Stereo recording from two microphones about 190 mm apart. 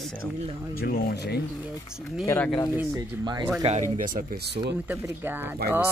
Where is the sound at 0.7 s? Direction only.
55° left (ahead or behind).